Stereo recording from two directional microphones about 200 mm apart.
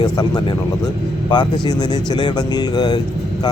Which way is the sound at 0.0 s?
20° left (ahead or behind).